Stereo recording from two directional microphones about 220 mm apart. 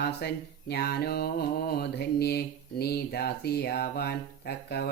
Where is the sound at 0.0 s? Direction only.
45° left (ahead or behind).